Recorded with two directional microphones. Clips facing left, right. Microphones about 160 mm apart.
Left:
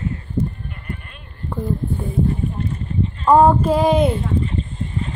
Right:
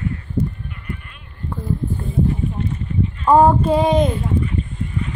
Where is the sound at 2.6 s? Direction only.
35° left (ahead or behind).